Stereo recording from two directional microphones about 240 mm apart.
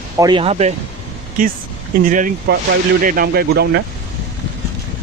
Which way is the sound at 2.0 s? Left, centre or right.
Right.